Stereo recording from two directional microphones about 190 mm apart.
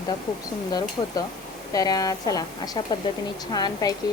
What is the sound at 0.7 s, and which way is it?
A woman's voice, 20° left (ahead or behind).